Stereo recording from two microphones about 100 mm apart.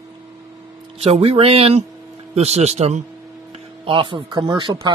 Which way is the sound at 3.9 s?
60° right (ahead or behind).